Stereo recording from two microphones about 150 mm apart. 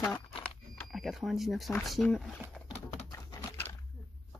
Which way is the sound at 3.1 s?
20° left (ahead or behind).